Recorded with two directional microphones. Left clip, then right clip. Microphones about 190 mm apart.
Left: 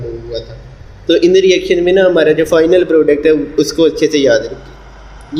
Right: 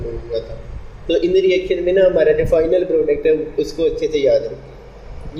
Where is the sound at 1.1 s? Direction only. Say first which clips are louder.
Left 6 dB; 40° left (ahead or behind).